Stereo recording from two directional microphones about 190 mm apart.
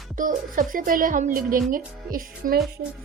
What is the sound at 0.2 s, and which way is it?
Music, 45° right (ahead or behind).